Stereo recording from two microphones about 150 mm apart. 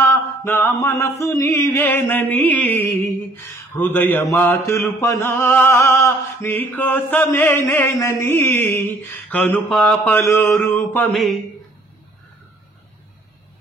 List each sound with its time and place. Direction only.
0.0 s mantra: 15° left (ahead or behind)